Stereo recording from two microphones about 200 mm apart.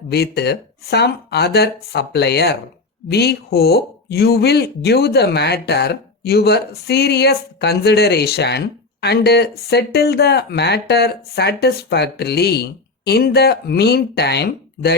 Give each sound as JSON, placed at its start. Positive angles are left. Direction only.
{"t": 0.1, "sound": "speech", "side_deg": 55}